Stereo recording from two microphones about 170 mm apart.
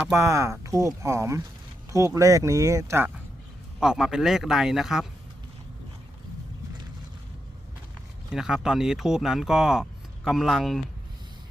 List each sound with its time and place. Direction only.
0.1 s speech: 15° right (ahead or behind)
3.8 s speech: centre (ahead or behind)
8.3 s speech: 5° right (ahead or behind)